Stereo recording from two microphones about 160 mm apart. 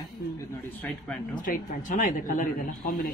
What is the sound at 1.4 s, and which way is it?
Speech, 55° left (ahead or behind).